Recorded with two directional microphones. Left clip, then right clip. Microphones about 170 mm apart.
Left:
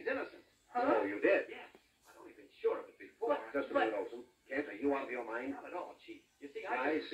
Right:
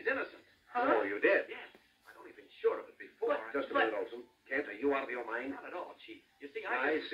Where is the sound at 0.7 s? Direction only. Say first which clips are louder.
Right 2 dB; centre (ahead or behind).